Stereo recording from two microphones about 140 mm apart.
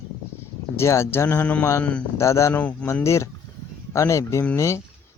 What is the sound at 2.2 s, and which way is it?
Speech, 20° left (ahead or behind).